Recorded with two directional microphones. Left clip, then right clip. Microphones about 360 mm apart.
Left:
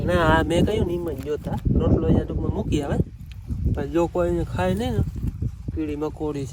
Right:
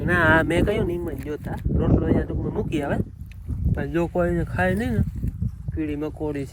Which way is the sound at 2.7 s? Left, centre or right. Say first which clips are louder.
Even; centre.